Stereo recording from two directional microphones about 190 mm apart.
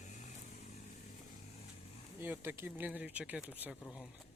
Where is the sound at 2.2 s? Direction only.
10° right (ahead or behind).